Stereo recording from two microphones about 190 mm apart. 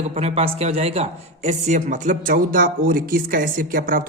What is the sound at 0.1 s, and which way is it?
Speech, 35° right (ahead or behind).